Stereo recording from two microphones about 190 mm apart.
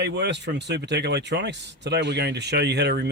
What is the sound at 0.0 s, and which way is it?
Speech, 65° right (ahead or behind).